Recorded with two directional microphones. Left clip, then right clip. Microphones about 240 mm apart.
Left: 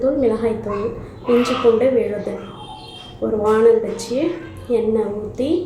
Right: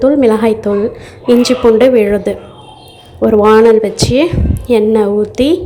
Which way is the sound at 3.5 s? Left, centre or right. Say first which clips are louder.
Right 5 dB; right.